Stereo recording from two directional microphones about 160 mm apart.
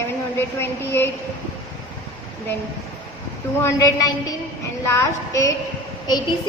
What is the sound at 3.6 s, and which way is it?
A woman's voice, 20° left (ahead or behind).